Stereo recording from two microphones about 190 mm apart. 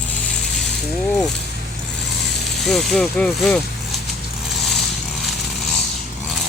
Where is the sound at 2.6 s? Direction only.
Centre (ahead or behind).